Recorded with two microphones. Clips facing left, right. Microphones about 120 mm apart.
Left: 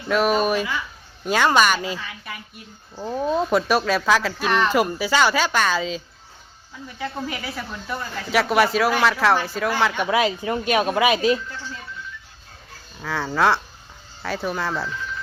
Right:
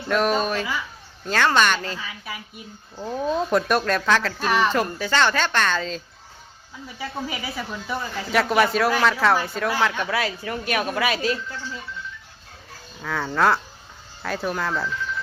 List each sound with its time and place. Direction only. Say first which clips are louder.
0.1 s a woman's voice: left 2 dB; 5° left (ahead or behind)
2.0 s speech: even; 5° right (ahead or behind)
4.4 s speech: even; 5° right (ahead or behind)
4.7 s a woman's voice: left 3 dB; 10° left (ahead or behind)
7.0 s speech: left 1 dB; centre (ahead or behind)
10.0 s speech: left 5 dB; 20° left (ahead or behind)
13.0 s speech: left 1 dB; centre (ahead or behind)